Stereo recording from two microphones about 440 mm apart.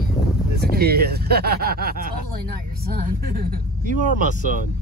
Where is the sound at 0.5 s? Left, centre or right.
Right.